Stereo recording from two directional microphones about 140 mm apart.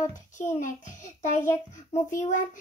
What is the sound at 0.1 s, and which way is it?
Child singing, 60° left (ahead or behind).